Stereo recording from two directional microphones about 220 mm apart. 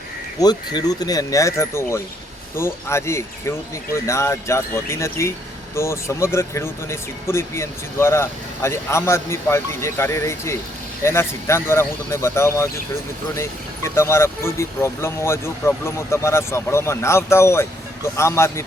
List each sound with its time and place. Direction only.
0.3 s speech: 20° left (ahead or behind)